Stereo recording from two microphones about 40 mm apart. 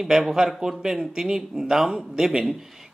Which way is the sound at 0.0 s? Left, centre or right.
Centre.